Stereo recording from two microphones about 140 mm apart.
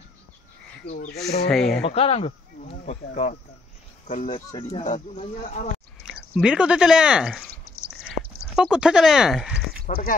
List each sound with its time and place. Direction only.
0.8 s speech: 90° left
1.2 s speech: centre (ahead or behind)
1.9 s speech: 45° left (ahead or behind)
4.1 s speech: 65° left (ahead or behind)
4.6 s speech: 45° left (ahead or behind)
4.9 s speech: 60° left (ahead or behind)
6.0 s speech: 5° right (ahead or behind)
8.5 s speech: 5° right (ahead or behind)
9.9 s speech: 65° left (ahead or behind)